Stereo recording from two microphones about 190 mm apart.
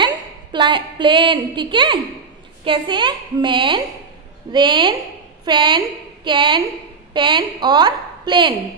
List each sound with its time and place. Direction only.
0.0 s a woman's voice: 25° right (ahead or behind)